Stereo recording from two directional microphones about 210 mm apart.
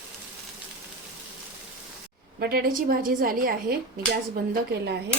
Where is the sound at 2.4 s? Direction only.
45° right (ahead or behind).